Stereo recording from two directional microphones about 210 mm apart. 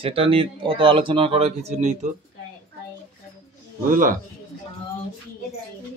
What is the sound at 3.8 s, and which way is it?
Speech, 40° right (ahead or behind).